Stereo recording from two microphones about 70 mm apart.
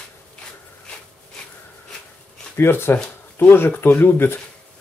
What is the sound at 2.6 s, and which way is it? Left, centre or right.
Speech, left.